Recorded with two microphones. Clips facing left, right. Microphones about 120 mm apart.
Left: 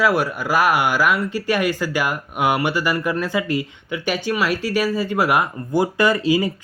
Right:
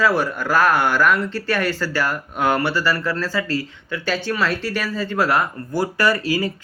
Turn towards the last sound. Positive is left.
turn(degrees=20)  # may be behind; listen again after turning